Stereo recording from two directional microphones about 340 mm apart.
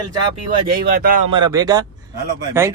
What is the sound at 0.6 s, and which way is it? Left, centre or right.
Speech, right.